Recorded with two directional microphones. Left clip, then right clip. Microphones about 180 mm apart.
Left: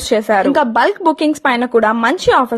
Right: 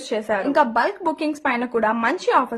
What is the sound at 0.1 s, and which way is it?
A woman's voice, 35° left (ahead or behind).